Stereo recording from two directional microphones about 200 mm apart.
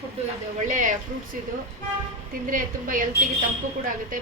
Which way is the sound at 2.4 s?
40° right (ahead or behind).